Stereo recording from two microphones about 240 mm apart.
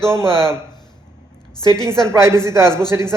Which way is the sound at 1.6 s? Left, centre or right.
Centre.